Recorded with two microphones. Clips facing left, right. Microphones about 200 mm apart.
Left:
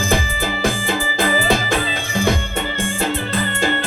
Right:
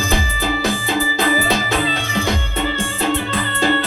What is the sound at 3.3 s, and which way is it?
Music, 50° left (ahead or behind).